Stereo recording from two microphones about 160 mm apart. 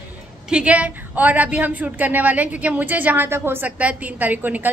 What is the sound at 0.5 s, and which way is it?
A woman's voice, 5° right (ahead or behind).